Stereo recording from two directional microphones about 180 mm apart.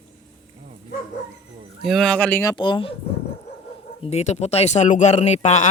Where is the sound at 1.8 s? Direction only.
Centre (ahead or behind); by 2.9 s 25° left (ahead or behind).